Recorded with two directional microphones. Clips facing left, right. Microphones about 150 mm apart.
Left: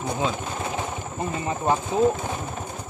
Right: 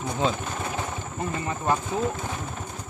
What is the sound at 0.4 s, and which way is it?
Speech, 20° left (ahead or behind).